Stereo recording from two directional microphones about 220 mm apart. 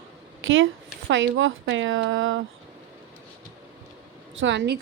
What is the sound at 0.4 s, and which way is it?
Speech, 60° right (ahead or behind).